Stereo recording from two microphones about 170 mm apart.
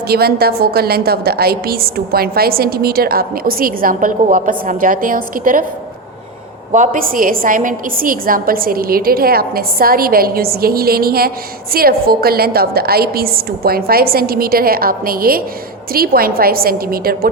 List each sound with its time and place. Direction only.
0.1 s a woman's voice: 65° right (ahead or behind)
6.7 s a woman's voice: 50° right (ahead or behind)